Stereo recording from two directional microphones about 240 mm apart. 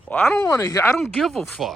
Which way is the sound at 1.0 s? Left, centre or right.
Centre.